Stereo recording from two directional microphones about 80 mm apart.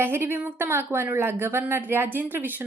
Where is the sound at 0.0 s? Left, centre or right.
Right.